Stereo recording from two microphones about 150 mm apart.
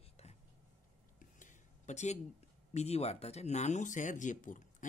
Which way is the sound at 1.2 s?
55° left (ahead or behind).